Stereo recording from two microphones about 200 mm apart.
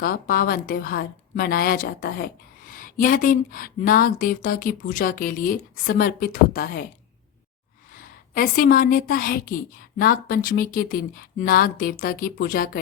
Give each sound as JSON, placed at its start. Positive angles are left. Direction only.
{"t": 0.0, "sound": "a woman's voice", "side_deg": 45}
{"t": 8.3, "sound": "a woman's voice", "side_deg": 45}